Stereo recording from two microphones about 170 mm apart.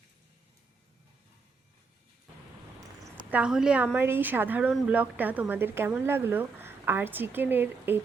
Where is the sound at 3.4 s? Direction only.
5° right (ahead or behind).